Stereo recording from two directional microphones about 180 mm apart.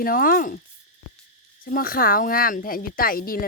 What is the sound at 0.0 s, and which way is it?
Speech, 50° left (ahead or behind).